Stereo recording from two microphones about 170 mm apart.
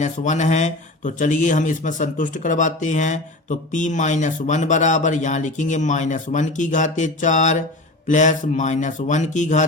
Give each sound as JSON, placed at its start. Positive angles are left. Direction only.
{"t": 0.0, "sound": "speech", "side_deg": 45}